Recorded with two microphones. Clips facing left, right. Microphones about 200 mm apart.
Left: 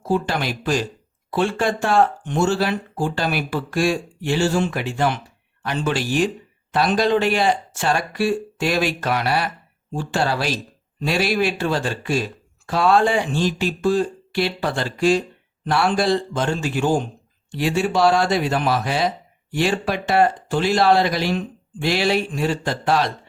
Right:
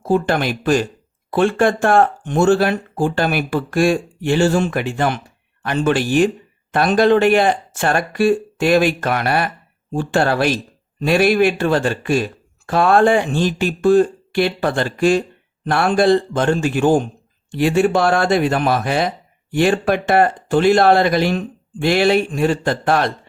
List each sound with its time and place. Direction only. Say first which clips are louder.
0.0 s speech: right 5 dB; 55° right (ahead or behind)